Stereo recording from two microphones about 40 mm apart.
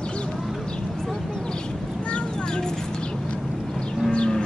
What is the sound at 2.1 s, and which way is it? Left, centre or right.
Vehicle, left.